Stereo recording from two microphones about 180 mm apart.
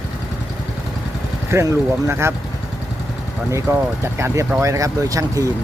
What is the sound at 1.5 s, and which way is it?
Speech, 15° right (ahead or behind).